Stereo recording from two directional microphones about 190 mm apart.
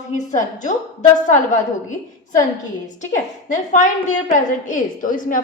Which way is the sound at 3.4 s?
40° left (ahead or behind).